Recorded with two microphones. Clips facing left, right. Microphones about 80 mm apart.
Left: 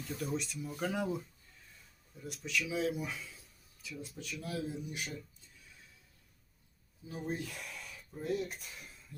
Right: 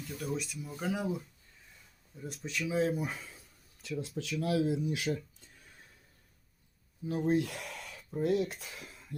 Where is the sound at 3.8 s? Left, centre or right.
Right.